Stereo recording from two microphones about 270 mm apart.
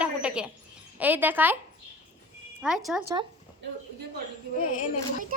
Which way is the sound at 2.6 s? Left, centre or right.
Centre.